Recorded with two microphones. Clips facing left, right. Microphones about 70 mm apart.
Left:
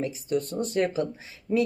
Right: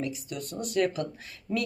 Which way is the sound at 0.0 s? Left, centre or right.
Left.